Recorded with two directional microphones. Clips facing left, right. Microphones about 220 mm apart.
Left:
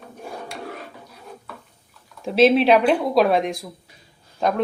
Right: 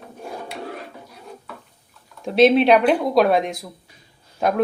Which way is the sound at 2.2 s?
Centre (ahead or behind).